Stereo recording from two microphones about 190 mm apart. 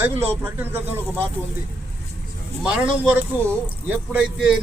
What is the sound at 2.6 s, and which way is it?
Speech, 5° right (ahead or behind).